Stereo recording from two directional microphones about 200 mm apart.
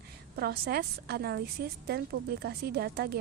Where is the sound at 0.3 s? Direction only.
55° right (ahead or behind).